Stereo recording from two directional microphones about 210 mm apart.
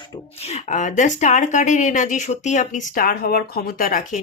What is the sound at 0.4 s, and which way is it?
Speech, 35° left (ahead or behind).